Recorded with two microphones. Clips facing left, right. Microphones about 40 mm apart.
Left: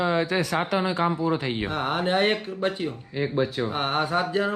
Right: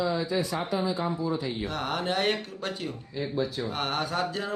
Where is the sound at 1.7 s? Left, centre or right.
Left.